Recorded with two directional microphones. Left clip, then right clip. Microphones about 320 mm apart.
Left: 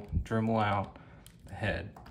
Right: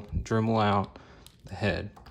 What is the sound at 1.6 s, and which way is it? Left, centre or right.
Speech, centre.